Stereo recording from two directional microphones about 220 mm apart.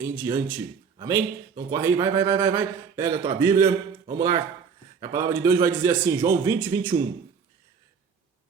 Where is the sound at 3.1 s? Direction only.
25° right (ahead or behind).